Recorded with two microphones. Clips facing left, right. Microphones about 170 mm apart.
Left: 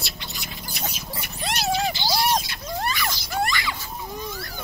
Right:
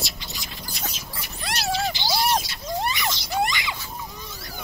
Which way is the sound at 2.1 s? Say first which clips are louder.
Right 1 dB; 5° right (ahead or behind).